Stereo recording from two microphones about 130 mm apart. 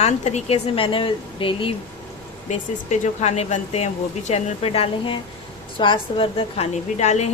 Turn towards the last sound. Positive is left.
turn(degrees=60)  # may be behind; listen again after turning